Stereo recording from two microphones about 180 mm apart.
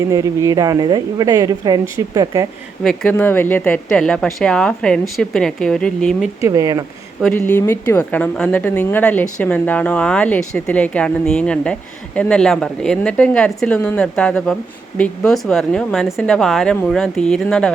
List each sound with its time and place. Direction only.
0.1 s speech: 20° right (ahead or behind)
2.8 s speech: 5° left (ahead or behind)
6.4 s speech: 20° right (ahead or behind)
7.2 s a woman's voice: 5° left (ahead or behind)